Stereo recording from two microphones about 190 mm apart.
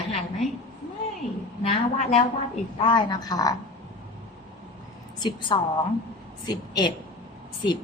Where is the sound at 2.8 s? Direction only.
20° left (ahead or behind).